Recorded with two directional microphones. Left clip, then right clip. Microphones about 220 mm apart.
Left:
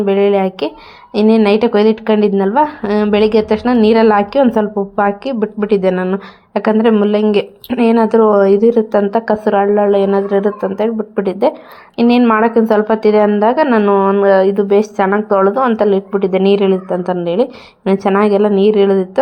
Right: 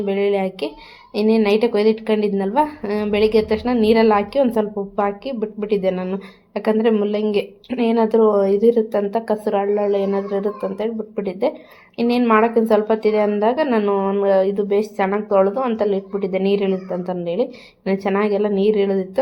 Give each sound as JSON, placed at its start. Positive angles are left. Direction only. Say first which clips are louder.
{"t": 0.0, "sound": "a woman's voice", "louder": "left 7 dB", "side_deg": 20}